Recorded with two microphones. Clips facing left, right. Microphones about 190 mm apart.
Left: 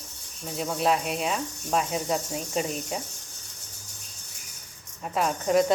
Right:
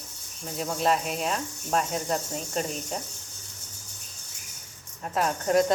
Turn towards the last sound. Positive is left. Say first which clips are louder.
# even
turn(degrees=0)  # may be behind; listen again after turning